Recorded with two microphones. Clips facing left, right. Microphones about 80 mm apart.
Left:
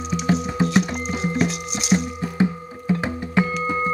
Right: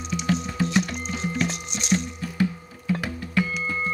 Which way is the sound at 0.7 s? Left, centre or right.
Centre.